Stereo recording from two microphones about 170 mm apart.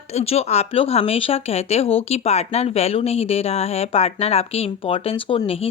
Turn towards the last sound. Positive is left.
turn(degrees=35)  # may be behind; listen again after turning